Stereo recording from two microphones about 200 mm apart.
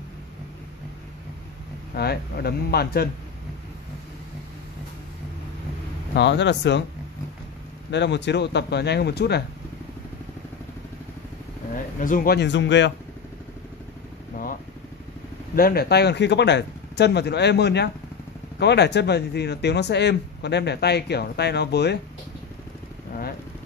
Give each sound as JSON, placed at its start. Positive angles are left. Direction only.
{"t": 2.0, "sound": "speech", "side_deg": 50}
{"t": 6.1, "sound": "speech", "side_deg": 60}
{"t": 7.9, "sound": "speech", "side_deg": 60}
{"t": 11.7, "sound": "speech", "side_deg": 45}
{"t": 14.3, "sound": "vehicle", "side_deg": 45}
{"t": 15.5, "sound": "speech", "side_deg": 50}